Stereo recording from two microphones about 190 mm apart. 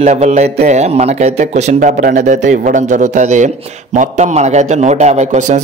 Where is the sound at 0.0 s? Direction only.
35° right (ahead or behind).